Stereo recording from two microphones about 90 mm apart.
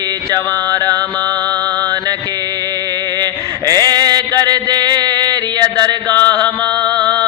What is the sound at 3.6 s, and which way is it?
Chant, 45° right (ahead or behind).